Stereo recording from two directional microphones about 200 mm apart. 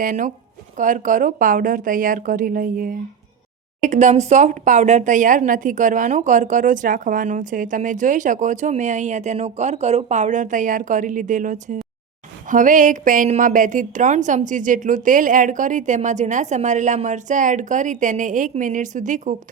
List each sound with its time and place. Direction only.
0.0 s speech: 40° right (ahead or behind)